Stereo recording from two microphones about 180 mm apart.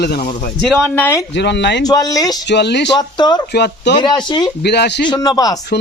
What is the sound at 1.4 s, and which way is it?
Speech, 70° left (ahead or behind).